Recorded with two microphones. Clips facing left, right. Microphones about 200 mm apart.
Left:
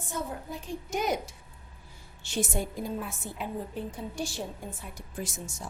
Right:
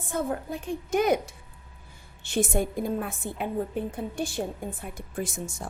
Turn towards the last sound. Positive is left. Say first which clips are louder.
# right 5 dB
turn(degrees=-55)  # may be behind; listen again after turning